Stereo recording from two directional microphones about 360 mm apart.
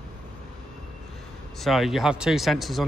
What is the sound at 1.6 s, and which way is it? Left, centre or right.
Speech, centre.